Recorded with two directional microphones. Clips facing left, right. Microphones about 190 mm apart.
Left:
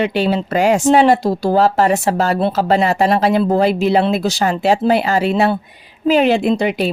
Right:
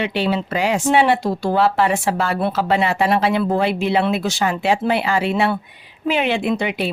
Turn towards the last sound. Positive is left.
turn(degrees=40)  # may be behind; listen again after turning